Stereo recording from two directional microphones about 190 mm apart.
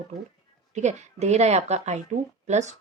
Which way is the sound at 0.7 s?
35° right (ahead or behind).